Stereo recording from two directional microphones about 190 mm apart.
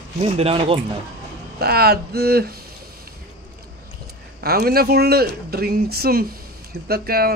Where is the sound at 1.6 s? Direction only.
55° right (ahead or behind).